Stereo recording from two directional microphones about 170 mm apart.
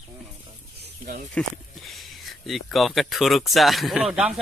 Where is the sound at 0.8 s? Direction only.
60° right (ahead or behind).